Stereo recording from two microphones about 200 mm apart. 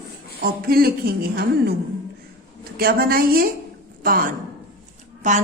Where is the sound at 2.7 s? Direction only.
50° right (ahead or behind).